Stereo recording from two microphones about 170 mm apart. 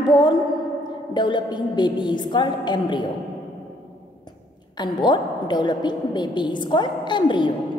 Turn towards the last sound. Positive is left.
turn(degrees=30)  # may be behind; listen again after turning